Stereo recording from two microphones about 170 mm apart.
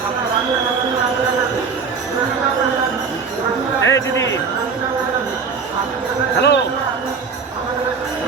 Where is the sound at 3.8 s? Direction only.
90° left.